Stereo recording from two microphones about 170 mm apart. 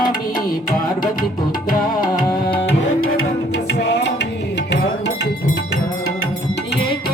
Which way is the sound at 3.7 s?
85° left.